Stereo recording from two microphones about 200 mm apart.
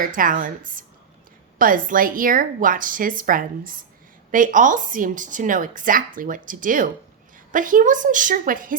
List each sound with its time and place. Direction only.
0.0 s a woman's voice: 45° right (ahead or behind)